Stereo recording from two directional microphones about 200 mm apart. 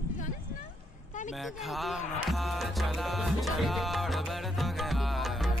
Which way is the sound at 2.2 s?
Centre (ahead or behind).